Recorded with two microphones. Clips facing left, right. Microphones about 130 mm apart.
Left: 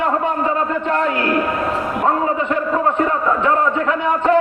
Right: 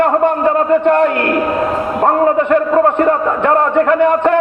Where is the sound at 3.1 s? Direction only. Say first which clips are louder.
Right 5 dB; 55° right (ahead or behind).